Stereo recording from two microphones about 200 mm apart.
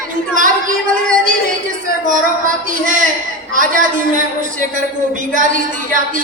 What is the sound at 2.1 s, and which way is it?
Speech, 40° right (ahead or behind).